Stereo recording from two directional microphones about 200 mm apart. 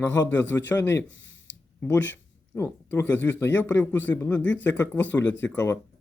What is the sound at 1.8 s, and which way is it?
Speech, 10° left (ahead or behind).